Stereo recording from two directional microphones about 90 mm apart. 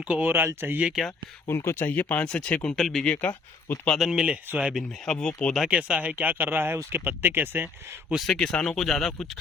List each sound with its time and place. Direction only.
0.0 s speech: 15° right (ahead or behind)
1.0 s speech: centre (ahead or behind)
1.5 s speech: 30° left (ahead or behind)
2.7 s speech: centre (ahead or behind)
3.2 s speech: 20° left (ahead or behind)
3.9 s speech: 5° right (ahead or behind)
4.8 s speech: 5° left (ahead or behind)
5.5 s speech: 10° right (ahead or behind)
8.3 s speech: 10° left (ahead or behind)